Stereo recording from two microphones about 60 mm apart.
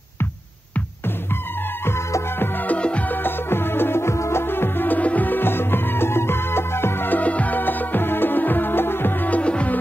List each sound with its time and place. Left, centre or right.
1.9 s music: left
2.6 s music: left
9.4 s music: left